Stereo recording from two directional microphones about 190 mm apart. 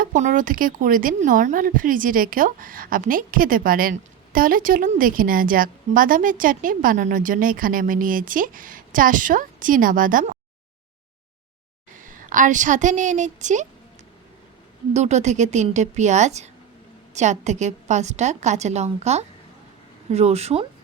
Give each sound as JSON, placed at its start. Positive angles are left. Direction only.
{"t": 0.0, "sound": "speech", "side_deg": -45}
{"t": 11.9, "sound": "a woman's voice", "side_deg": -45}
{"t": 14.9, "sound": "a woman's voice", "side_deg": -35}